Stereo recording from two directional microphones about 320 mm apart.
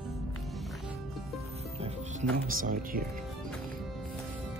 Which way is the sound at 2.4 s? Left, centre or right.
Right.